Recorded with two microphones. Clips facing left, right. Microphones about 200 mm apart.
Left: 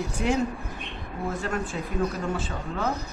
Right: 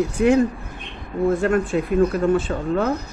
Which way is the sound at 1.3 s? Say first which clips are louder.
Right 11 dB; 55° right (ahead or behind).